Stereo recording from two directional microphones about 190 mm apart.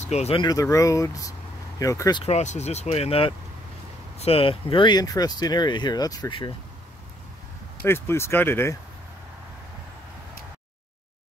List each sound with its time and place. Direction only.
0.0 s speech: 35° left (ahead or behind)
0.4 s speech: 20° left (ahead or behind)
2.2 s speech: 35° left (ahead or behind); by 6.5 s 20° left (ahead or behind)
7.8 s speech: 15° left (ahead or behind)